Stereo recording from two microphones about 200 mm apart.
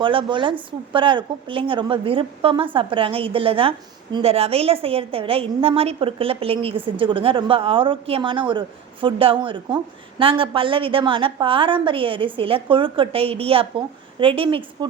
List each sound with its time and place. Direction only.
0.0 s a woman's voice: 25° right (ahead or behind)